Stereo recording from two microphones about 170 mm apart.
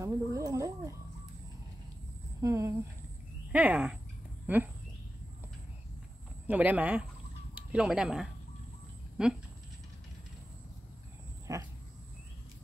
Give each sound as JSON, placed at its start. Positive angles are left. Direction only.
{"t": 0.0, "sound": "speech", "side_deg": -20}
{"t": 2.4, "sound": "speech", "side_deg": -15}
{"t": 6.4, "sound": "speech", "side_deg": -10}
{"t": 11.5, "sound": "a sound", "side_deg": -20}